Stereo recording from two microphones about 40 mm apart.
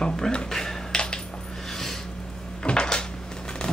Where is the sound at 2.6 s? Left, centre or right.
Left.